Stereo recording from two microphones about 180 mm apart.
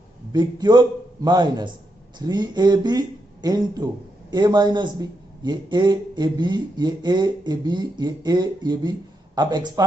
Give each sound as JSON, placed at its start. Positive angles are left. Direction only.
{"t": 0.3, "sound": "speech", "side_deg": -20}